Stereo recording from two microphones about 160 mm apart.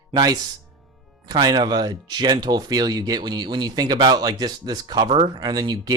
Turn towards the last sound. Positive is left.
turn(degrees=-25)  # may be behind; listen again after turning